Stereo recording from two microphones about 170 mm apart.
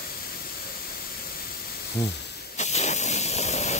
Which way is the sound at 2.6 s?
40° left (ahead or behind).